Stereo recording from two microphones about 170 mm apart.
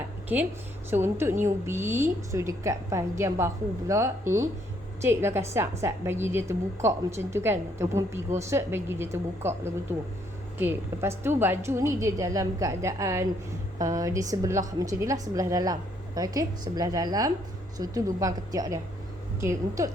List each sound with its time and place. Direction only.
0.3 s a woman's voice: 10° right (ahead or behind)